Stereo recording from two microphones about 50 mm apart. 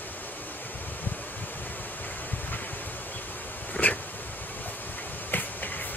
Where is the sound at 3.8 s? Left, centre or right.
Left.